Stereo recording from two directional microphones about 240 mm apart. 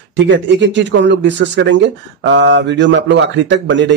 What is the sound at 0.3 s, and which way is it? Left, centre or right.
Speech, right.